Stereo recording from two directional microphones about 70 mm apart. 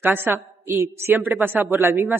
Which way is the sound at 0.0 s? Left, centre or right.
Right.